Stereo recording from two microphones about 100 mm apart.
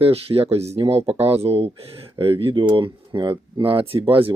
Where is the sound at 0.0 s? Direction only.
75° right (ahead or behind).